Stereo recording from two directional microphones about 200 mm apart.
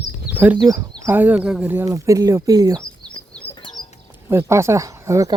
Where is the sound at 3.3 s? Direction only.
5° left (ahead or behind).